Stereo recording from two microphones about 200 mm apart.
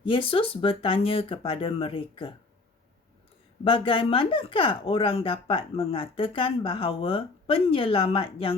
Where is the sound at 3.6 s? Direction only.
25° left (ahead or behind).